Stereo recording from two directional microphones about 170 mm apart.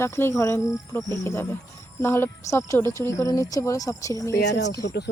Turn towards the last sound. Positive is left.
turn(degrees=80)